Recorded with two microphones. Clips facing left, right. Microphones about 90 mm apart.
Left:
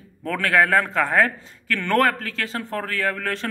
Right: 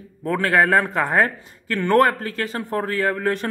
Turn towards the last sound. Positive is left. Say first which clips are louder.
# right 4 dB
turn(degrees=-15)  # may be behind; listen again after turning